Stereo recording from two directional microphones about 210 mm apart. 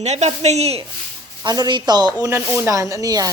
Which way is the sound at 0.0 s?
30° right (ahead or behind).